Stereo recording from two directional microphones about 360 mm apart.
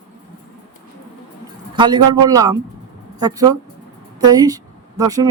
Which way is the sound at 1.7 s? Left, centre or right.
Centre.